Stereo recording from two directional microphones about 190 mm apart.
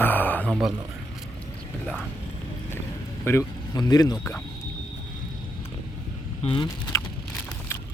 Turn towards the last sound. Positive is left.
turn(degrees=25)  # may be behind; listen again after turning